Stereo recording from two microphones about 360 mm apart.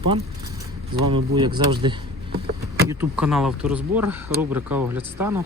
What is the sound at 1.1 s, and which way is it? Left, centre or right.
Speech, centre.